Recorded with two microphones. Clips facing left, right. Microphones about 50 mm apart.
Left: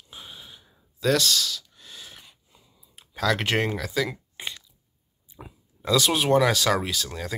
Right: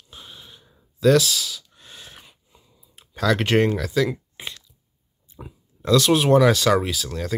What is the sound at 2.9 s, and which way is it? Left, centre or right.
Speech, centre.